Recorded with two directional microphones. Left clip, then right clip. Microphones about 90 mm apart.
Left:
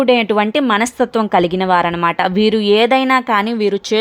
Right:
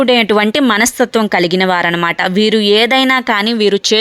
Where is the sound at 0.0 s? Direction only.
30° right (ahead or behind).